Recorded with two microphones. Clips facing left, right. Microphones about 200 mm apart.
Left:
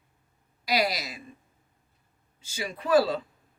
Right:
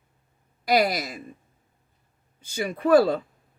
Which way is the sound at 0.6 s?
50° right (ahead or behind).